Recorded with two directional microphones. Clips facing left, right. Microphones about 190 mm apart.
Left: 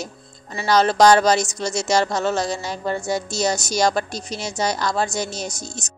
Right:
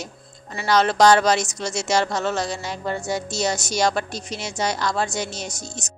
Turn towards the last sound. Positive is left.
turn(degrees=40)  # may be behind; listen again after turning